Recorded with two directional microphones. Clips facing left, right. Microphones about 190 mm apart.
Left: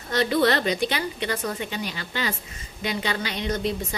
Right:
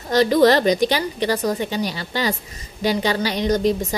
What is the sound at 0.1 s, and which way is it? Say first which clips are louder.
A woman's voice: right 7 dB; 40° right (ahead or behind).